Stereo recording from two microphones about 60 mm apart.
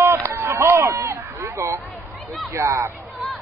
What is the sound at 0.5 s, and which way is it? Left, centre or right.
Speech, right.